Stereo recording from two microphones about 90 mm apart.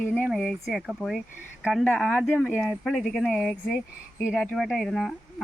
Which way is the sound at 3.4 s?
10° right (ahead or behind).